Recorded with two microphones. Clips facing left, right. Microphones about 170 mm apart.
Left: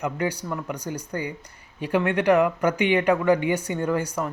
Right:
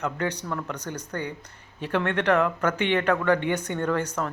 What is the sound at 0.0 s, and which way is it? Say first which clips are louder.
Speech: left 2 dB; 10° left (ahead or behind).